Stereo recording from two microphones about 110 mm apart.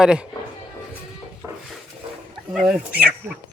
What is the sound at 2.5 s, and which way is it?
Speech, 5° right (ahead or behind).